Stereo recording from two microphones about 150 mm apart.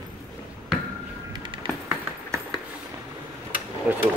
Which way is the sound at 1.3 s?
30° right (ahead or behind).